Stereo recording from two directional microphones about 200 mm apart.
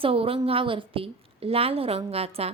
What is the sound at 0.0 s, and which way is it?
A woman's voice, 30° right (ahead or behind).